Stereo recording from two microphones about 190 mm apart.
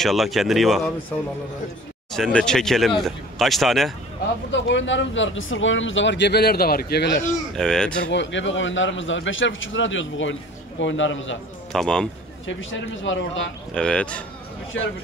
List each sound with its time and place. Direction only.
0.0 s speech: centre (ahead or behind)
2.1 s speech: 5° left (ahead or behind)
4.5 s speech: 70° left (ahead or behind)
7.5 s speech: 5° left (ahead or behind)
8.1 s a man's voice: 75° left (ahead or behind)
10.8 s speech: 75° left (ahead or behind)
11.7 s speech: 5° left (ahead or behind)
12.4 s a man's voice: 85° left
13.7 s speech: 5° left (ahead or behind)